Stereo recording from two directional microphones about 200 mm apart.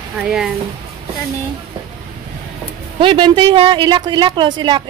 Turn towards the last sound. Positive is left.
turn(degrees=-20)  # may be behind; listen again after turning